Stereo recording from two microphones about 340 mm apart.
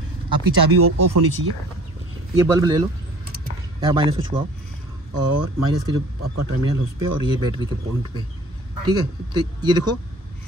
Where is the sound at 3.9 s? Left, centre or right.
Centre.